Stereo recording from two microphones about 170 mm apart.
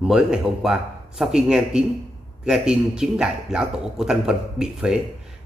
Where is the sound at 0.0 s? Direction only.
5° right (ahead or behind).